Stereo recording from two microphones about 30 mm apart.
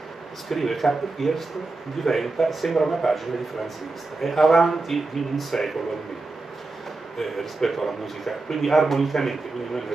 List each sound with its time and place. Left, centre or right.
0.5 s a man's voice: centre
4.2 s speech: centre
7.2 s speech: centre